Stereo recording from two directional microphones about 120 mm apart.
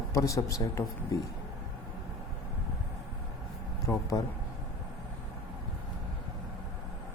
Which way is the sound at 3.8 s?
25° left (ahead or behind).